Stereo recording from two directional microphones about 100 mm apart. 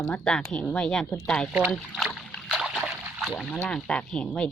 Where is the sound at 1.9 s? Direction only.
5° left (ahead or behind).